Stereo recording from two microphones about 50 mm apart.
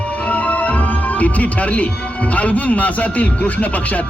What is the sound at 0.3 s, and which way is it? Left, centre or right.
Speech, left.